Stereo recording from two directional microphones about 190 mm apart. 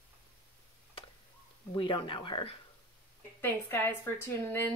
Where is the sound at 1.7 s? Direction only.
25° left (ahead or behind).